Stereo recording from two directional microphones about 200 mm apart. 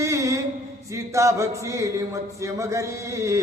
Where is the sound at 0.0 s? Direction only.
15° right (ahead or behind).